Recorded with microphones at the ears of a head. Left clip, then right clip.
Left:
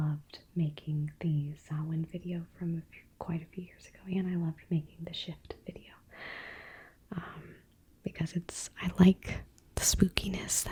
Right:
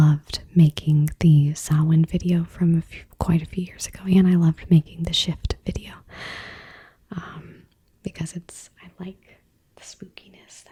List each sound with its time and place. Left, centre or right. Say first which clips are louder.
0.0 s speech: right 17 dB; right
8.6 s speech: left 12 dB; left